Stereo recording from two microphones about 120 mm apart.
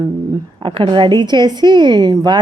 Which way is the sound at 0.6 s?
45° right (ahead or behind).